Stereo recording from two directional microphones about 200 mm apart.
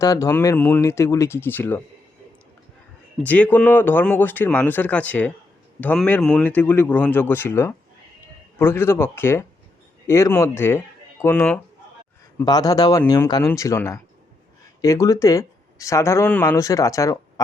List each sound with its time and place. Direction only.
0.0 s speech: 15° left (ahead or behind)
3.2 s speech: 5° left (ahead or behind)